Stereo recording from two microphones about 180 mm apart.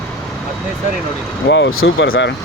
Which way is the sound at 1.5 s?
90° left.